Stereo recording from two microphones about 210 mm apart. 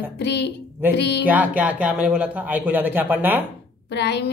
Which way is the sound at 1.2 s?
5° right (ahead or behind).